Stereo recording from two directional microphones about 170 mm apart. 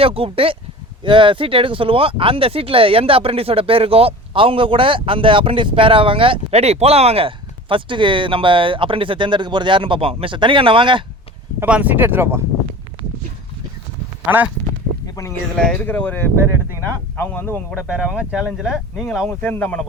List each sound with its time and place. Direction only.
0.0 s speech: 35° right (ahead or behind)
11.6 s speech: 10° right (ahead or behind)
14.3 s speech: 10° right (ahead or behind)
15.5 s speech: 5° left (ahead or behind)
17.3 s speech: 10° left (ahead or behind)
17.7 s speech: 5° right (ahead or behind)
19.4 s speech: 10° left (ahead or behind)